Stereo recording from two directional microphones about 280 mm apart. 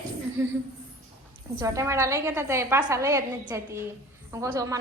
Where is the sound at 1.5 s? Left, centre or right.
Centre.